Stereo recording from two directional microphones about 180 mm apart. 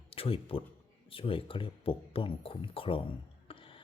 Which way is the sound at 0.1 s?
30° left (ahead or behind).